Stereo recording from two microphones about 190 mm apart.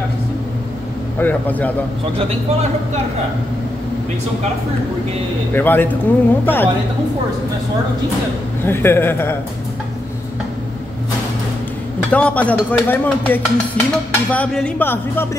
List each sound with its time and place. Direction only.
1.2 s speech: 10° left (ahead or behind)
2.1 s a man's voice: 35° right (ahead or behind)
5.5 s speech: 10° left (ahead or behind)
8.6 s speech: 10° left (ahead or behind)
12.1 s speech: 5° left (ahead or behind)